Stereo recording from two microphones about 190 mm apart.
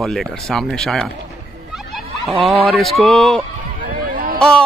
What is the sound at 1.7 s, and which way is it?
Snicker, centre (ahead or behind).